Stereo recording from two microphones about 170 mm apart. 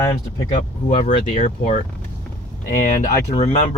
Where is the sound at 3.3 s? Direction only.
35° left (ahead or behind).